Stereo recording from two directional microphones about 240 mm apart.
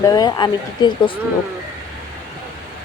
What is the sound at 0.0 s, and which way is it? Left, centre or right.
Speech, centre.